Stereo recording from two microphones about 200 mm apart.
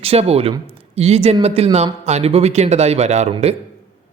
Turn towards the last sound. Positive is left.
turn(degrees=-35)  # may be behind; listen again after turning